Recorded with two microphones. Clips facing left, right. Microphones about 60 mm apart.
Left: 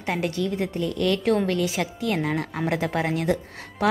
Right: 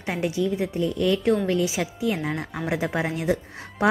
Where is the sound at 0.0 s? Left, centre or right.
Centre.